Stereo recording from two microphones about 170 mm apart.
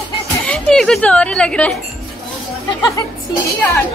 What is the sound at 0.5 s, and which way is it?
Speech, 5° left (ahead or behind).